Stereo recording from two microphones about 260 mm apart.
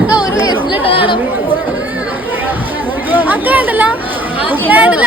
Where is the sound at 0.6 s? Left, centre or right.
Centre.